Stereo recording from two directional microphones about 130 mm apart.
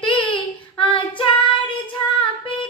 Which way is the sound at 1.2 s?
40° left (ahead or behind).